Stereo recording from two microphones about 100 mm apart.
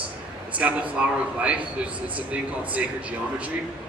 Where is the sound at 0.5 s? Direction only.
15° right (ahead or behind).